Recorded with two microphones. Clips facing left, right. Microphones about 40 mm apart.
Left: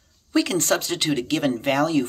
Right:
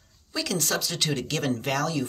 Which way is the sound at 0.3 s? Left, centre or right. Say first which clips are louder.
Left 7 dB; left.